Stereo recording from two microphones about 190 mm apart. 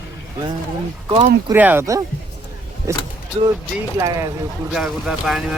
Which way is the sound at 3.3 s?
30° right (ahead or behind).